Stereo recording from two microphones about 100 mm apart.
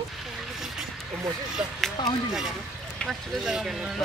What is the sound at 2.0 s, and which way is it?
Speech, 45° left (ahead or behind).